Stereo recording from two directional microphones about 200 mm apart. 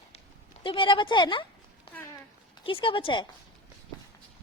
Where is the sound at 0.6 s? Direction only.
25° left (ahead or behind).